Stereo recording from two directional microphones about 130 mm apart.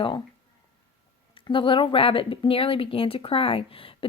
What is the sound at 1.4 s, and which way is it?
A woman's voice, 40° left (ahead or behind).